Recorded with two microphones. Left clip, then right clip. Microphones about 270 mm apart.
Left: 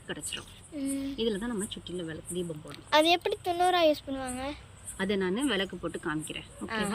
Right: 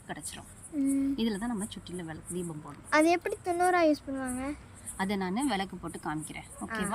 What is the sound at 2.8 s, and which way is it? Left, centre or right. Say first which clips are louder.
Speech: left 1 dB; left.